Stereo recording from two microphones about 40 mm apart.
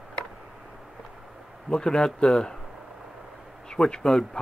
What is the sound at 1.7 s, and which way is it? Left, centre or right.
Speech, centre.